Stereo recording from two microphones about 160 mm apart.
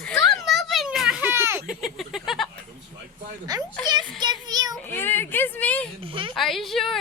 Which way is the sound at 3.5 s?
25° right (ahead or behind).